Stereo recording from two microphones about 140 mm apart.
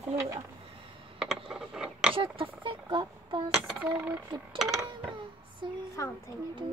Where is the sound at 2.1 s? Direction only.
40° right (ahead or behind).